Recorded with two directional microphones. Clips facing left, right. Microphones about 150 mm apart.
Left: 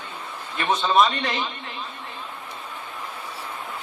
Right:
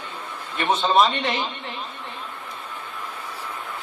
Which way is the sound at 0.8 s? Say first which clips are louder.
Right 1 dB; 25° right (ahead or behind).